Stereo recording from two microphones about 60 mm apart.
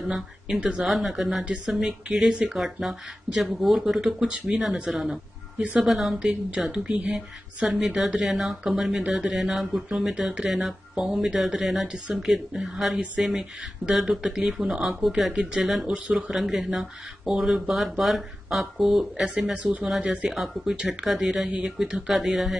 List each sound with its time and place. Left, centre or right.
0.0 s speech: centre
0.6 s speech: centre
0.8 s speech: centre
11.9 s speech: centre
20.2 s speech: centre
20.7 s speech: centre
21.0 s speech: centre